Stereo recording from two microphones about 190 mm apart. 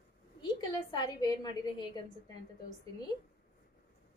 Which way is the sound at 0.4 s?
20° left (ahead or behind).